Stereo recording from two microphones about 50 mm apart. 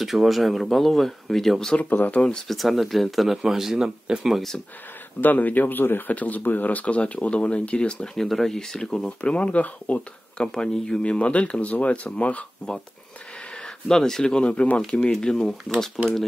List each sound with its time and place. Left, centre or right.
0.0 s speech: centre
1.8 s speech: left
2.4 s speech: centre
3.4 s speech: centre
5.2 s speech: left
6.1 s speech: left
8.1 s speech: centre
9.2 s speech: left
10.3 s speech: centre
11.0 s speech: left
13.6 s speech: centre